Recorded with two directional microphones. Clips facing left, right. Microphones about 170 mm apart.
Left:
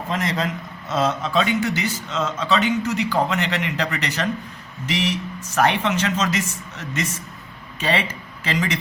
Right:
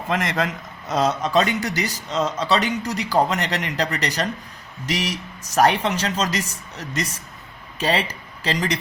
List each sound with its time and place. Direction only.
0.9 s a man's voice: 40° right (ahead or behind)